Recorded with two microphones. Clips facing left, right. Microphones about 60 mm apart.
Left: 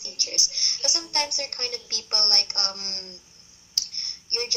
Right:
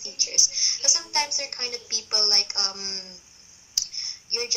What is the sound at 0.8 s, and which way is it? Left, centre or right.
A woman's voice, right.